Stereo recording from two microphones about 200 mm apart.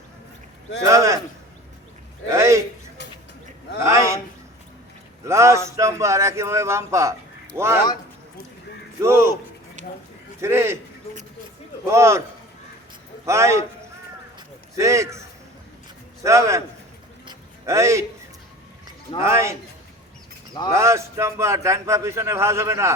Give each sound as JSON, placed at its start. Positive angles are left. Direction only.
{"t": 0.9, "sound": "speech", "side_deg": -15}
{"t": 2.3, "sound": "speech", "side_deg": -15}
{"t": 3.8, "sound": "speech", "side_deg": -15}
{"t": 5.2, "sound": "speech", "side_deg": -15}
{"t": 9.0, "sound": "speech", "side_deg": -15}
{"t": 9.8, "sound": "speech", "side_deg": -35}
{"t": 10.4, "sound": "speech", "side_deg": -15}
{"t": 11.9, "sound": "speech", "side_deg": -15}
{"t": 13.2, "sound": "speech", "side_deg": -15}
{"t": 14.3, "sound": "a sound", "side_deg": -15}
{"t": 16.2, "sound": "speech", "side_deg": -15}
{"t": 17.2, "sound": "a sound", "side_deg": -15}
{"t": 19.2, "sound": "speech", "side_deg": -15}
{"t": 20.7, "sound": "speech", "side_deg": -15}